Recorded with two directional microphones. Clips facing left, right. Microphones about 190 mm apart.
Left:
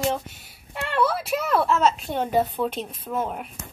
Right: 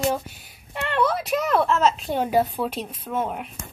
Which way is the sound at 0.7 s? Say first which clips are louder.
Right 1 dB; 5° left (ahead or behind).